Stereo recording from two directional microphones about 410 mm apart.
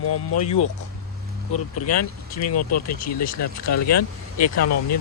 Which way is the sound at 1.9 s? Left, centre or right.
Left.